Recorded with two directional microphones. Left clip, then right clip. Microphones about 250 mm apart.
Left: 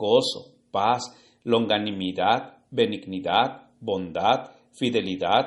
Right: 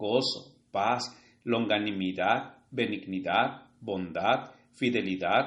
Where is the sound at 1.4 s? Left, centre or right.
Left.